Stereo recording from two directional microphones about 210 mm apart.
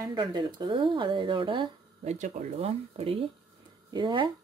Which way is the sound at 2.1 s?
35° right (ahead or behind).